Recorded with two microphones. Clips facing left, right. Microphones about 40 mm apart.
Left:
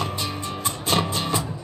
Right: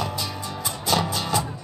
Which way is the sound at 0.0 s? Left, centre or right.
Left.